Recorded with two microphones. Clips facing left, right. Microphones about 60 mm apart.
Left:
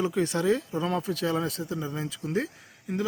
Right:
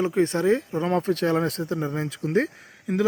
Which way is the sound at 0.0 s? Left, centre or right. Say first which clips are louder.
Right 4 dB; right.